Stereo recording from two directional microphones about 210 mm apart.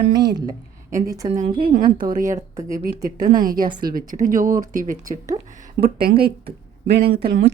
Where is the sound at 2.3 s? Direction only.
15° right (ahead or behind).